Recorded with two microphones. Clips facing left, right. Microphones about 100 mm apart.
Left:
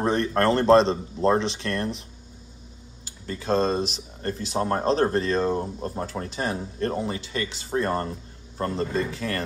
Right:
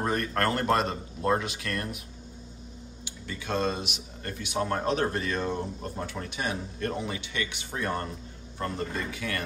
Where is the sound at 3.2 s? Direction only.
35° left (ahead or behind).